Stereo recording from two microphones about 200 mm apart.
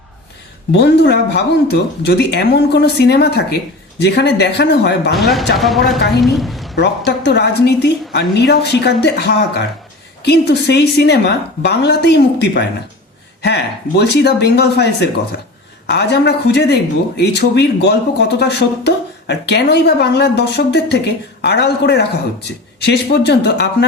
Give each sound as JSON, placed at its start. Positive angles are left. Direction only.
{"t": 0.7, "sound": "speech", "side_deg": 60}
{"t": 5.5, "sound": "a woman's voice", "side_deg": 0}
{"t": 6.7, "sound": "speech", "side_deg": 60}